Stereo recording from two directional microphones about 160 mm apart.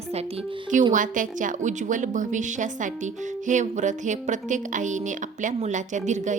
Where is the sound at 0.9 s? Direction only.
55° right (ahead or behind).